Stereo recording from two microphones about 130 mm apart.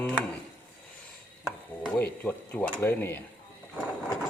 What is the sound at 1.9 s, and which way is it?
Speech, 15° left (ahead or behind).